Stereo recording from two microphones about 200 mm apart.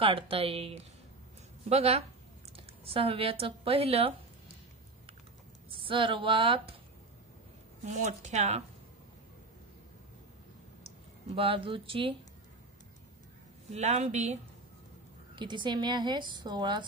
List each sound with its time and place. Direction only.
0.0 s a woman's voice: 25° right (ahead or behind)
5.7 s a woman's voice: 25° right (ahead or behind)
7.8 s speech: 35° right (ahead or behind)
11.3 s a woman's voice: 25° right (ahead or behind)
13.7 s speech: 35° right (ahead or behind)
15.3 s a woman's voice: 25° right (ahead or behind)